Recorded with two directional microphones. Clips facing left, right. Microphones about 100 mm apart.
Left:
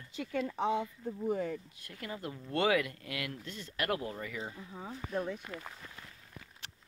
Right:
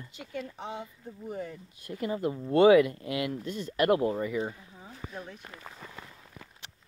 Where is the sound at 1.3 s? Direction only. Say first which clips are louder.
Even; 90° left.